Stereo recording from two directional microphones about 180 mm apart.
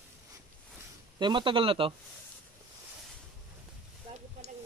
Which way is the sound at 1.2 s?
25° right (ahead or behind).